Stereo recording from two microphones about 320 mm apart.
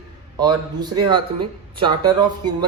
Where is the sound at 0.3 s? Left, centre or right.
Centre.